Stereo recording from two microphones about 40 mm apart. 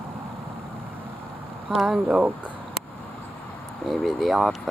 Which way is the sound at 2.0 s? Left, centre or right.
Right.